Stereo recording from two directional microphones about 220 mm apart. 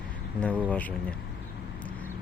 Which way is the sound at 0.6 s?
5° left (ahead or behind).